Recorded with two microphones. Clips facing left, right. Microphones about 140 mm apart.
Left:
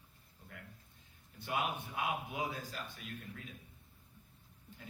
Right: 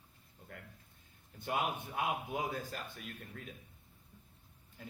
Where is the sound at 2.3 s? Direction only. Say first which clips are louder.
Right 2 dB; 50° right (ahead or behind).